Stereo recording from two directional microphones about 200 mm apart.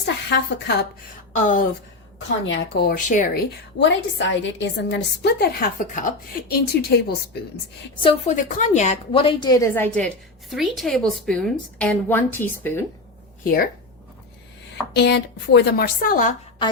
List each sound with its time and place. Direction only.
0.0 s a woman's voice: 55° left (ahead or behind)
1.3 s speech: 40° left (ahead or behind)
2.7 s a woman's voice: 60° left (ahead or behind)
3.1 s speech: 40° left (ahead or behind)
3.8 s a woman's voice: 65° left (ahead or behind)
8.0 s a woman's voice: 35° left (ahead or behind); by 12.8 s 10° left (ahead or behind)
13.4 s speech: 45° left (ahead or behind)
14.9 s a woman's voice: 60° left (ahead or behind)